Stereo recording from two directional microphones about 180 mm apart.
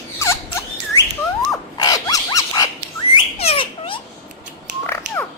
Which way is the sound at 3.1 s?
35° left (ahead or behind).